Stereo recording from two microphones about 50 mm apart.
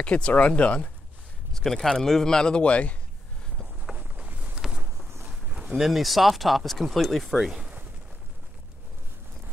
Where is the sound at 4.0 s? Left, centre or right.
Right.